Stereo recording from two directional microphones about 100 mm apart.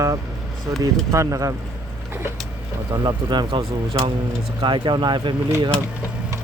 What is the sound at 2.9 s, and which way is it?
Speech, 45° right (ahead or behind).